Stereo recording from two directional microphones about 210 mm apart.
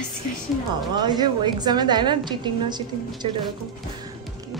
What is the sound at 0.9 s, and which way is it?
A woman's voice, 20° right (ahead or behind).